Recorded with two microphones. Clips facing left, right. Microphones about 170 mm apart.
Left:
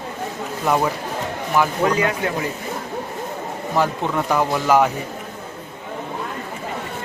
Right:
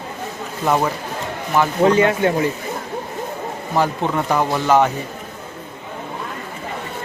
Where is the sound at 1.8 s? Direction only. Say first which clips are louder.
Right 5 dB; 30° right (ahead or behind).